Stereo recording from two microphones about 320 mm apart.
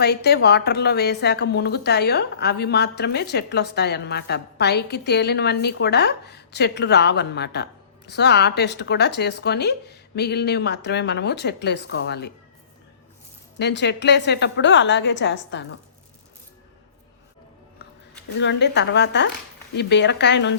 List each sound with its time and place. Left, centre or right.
0.0 s a woman's voice: left
13.6 s a woman's voice: left
18.3 s a woman's voice: left